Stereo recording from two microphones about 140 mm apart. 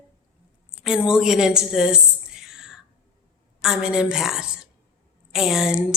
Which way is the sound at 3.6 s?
5° right (ahead or behind).